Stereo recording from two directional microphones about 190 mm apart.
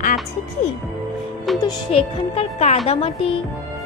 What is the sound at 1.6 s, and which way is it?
Speech, 30° left (ahead or behind).